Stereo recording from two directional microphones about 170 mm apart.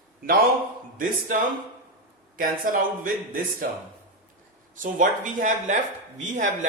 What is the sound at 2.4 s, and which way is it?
Speech, 55° right (ahead or behind).